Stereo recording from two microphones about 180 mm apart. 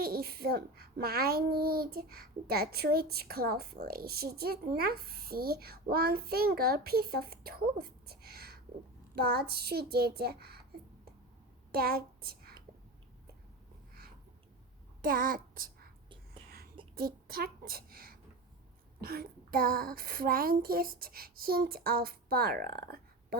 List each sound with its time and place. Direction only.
0.0 s a child's voice: 55° right (ahead or behind)
11.7 s a woman's voice: 55° right (ahead or behind)
15.0 s a child's voice: 50° right (ahead or behind)
16.9 s a woman's voice: 55° right (ahead or behind)